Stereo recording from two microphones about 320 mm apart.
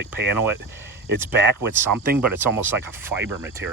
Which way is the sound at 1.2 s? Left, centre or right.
Centre.